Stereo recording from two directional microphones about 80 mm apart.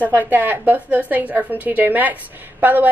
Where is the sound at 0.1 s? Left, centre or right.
Right.